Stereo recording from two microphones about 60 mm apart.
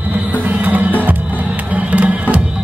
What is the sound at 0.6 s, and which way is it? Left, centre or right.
Music, right.